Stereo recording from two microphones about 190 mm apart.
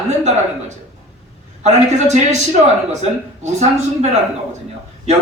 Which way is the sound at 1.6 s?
40° right (ahead or behind).